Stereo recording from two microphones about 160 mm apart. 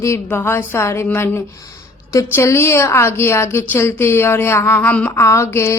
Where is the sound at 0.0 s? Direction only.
15° left (ahead or behind).